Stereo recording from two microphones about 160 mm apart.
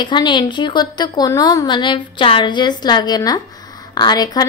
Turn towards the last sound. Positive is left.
turn(degrees=25)  # may be behind; listen again after turning